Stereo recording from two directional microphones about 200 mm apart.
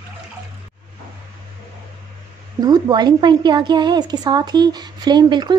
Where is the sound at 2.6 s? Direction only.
20° right (ahead or behind).